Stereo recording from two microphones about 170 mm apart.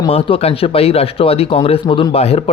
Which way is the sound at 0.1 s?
35° left (ahead or behind).